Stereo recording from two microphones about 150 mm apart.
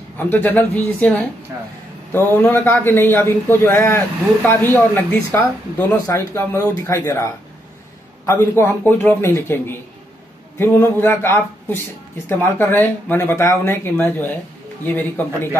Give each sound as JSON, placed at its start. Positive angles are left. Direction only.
{"t": 0.2, "sound": "a man's voice", "side_deg": 10}
{"t": 8.3, "sound": "a man's voice", "side_deg": 15}